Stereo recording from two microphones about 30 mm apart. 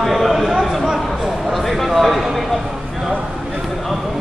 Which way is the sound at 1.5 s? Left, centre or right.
Centre.